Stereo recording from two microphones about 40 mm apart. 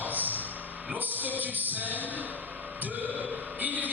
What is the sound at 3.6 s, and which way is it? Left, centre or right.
Music, right.